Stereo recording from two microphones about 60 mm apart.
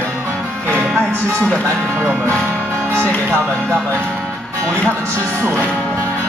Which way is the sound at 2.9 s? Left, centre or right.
Left.